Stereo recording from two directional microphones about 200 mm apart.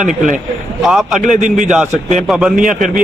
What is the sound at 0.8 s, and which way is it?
Speech, centre (ahead or behind).